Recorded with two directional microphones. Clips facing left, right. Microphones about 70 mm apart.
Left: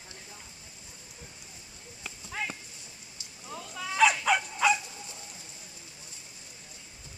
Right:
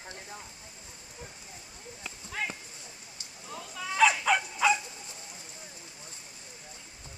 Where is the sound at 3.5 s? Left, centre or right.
Centre.